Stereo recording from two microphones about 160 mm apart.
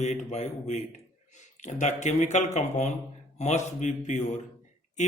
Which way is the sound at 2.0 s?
50° left (ahead or behind).